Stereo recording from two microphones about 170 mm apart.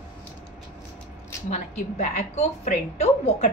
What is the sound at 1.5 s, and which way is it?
A woman's voice, 40° left (ahead or behind).